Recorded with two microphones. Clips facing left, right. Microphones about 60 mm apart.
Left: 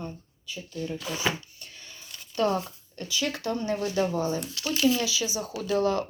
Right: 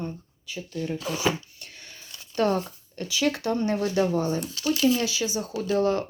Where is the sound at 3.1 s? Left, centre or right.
Right.